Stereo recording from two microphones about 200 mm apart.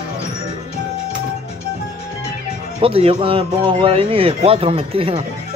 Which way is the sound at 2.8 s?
30° right (ahead or behind).